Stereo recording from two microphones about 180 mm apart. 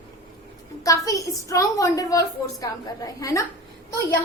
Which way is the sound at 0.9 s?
20° left (ahead or behind).